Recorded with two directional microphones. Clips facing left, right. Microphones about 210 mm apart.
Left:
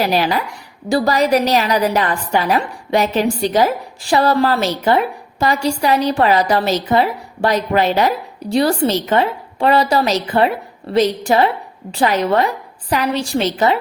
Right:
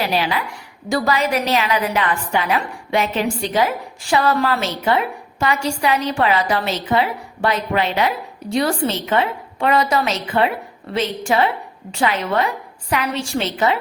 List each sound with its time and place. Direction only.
0.0 s a woman's voice: 40° left (ahead or behind)